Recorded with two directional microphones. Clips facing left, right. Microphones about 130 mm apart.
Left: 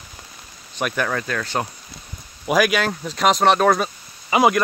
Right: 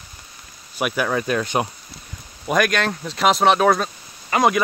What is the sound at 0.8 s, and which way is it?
Speech, 5° right (ahead or behind).